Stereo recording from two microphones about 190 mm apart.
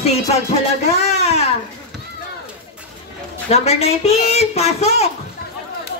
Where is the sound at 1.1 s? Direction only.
35° left (ahead or behind).